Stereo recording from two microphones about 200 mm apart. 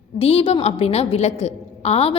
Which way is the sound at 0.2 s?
30° left (ahead or behind).